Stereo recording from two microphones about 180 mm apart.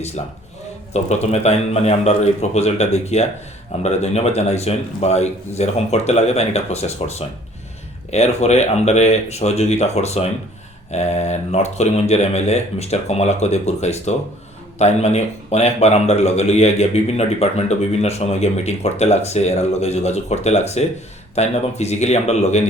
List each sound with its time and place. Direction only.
0.2 s a man's voice: 35° left (ahead or behind)